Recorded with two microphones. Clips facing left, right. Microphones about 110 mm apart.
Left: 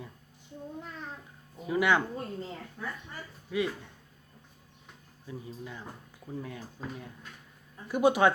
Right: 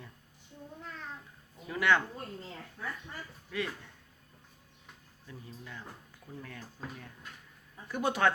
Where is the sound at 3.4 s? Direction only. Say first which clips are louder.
Left 6 dB; 15° left (ahead or behind).